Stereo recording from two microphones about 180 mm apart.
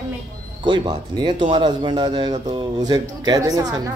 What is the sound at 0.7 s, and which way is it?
A woman's voice, 25° right (ahead or behind).